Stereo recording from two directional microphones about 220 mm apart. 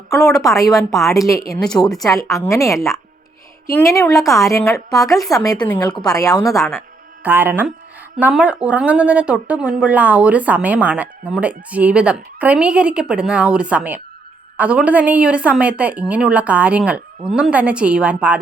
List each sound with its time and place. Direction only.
0.1 s a woman's voice: centre (ahead or behind)
1.3 s a woman's voice: 15° left (ahead or behind)
1.5 s speech: 5° left (ahead or behind)
2.5 s a woman's voice: 15° left (ahead or behind)
7.2 s speech: 10° right (ahead or behind)